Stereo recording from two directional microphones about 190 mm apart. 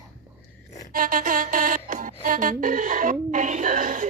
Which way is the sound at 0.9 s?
45° right (ahead or behind).